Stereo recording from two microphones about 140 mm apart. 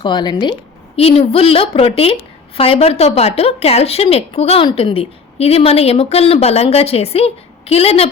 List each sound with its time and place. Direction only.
0.0 s speech: 35° left (ahead or behind)
0.9 s a woman's voice: 45° left (ahead or behind)